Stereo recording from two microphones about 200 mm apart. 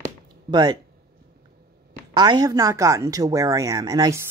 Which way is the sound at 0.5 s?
20° right (ahead or behind).